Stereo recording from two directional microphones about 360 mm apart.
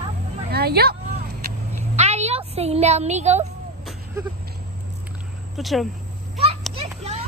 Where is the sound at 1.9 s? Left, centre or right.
Centre.